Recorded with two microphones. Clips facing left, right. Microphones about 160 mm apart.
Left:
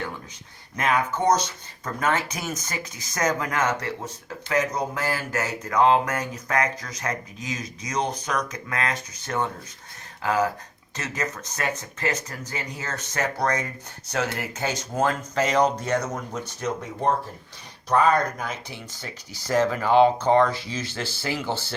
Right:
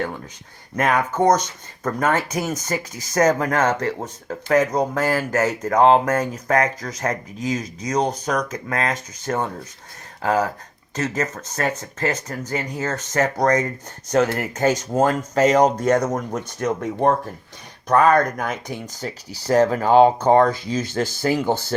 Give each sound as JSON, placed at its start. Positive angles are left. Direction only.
{"t": 0.8, "sound": "speech", "side_deg": -45}